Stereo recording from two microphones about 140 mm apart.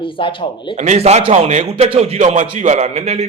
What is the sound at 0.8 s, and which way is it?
A man's voice, 55° right (ahead or behind).